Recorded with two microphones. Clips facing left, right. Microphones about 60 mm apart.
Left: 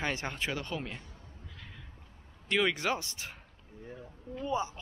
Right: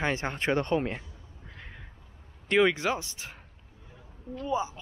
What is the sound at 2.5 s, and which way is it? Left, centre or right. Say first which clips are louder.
Speech: right 6 dB; centre.